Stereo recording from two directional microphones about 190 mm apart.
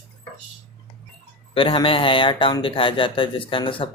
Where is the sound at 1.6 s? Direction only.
30° left (ahead or behind).